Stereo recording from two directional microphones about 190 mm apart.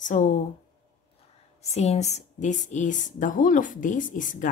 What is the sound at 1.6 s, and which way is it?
Speech, 35° left (ahead or behind).